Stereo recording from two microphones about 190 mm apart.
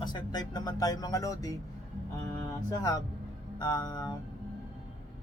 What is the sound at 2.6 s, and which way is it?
Speech, 20° left (ahead or behind).